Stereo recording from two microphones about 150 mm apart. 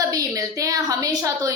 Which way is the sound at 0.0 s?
25° right (ahead or behind).